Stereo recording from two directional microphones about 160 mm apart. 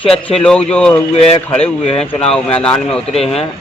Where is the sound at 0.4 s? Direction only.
5° left (ahead or behind).